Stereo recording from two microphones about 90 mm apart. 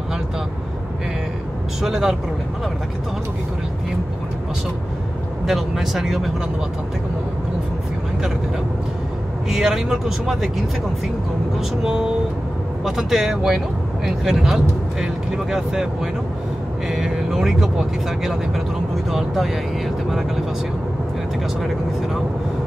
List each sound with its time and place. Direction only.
1.8 s speech: 5° right (ahead or behind)
5.5 s speech: centre (ahead or behind)
9.5 s speech: 5° right (ahead or behind)
11.8 s speech: 5° right (ahead or behind)